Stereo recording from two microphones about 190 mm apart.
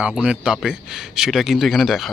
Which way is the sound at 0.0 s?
5° right (ahead or behind).